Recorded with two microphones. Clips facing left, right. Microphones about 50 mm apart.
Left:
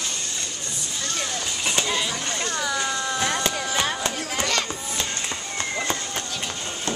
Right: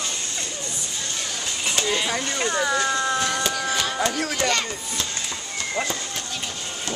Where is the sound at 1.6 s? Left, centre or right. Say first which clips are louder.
Right 1 dB; centre.